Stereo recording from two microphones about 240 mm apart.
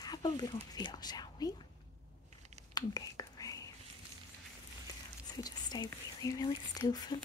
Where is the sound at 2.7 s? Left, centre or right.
Centre.